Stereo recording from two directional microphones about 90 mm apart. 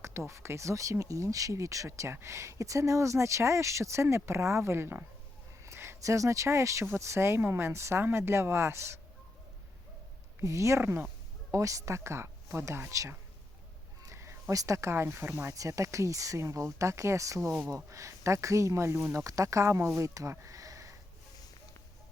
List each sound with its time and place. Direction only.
0.0 s speech: 30° right (ahead or behind)
10.4 s speech: 35° right (ahead or behind)
11.5 s speech: 40° right (ahead or behind)
15.5 s speech: 40° right (ahead or behind)